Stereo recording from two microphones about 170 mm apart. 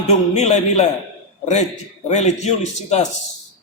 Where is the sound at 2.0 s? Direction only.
40° left (ahead or behind).